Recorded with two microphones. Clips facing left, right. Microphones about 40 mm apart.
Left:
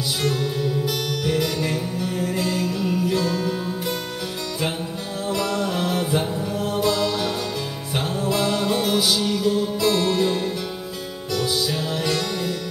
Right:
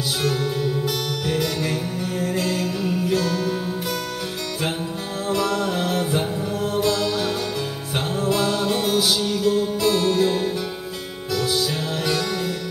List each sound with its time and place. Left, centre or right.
0.2 s music: centre
5.3 s music: centre
9.9 s music: centre